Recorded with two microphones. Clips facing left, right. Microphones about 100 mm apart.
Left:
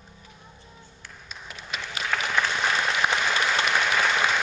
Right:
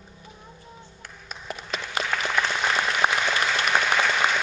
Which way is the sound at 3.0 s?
25° right (ahead or behind).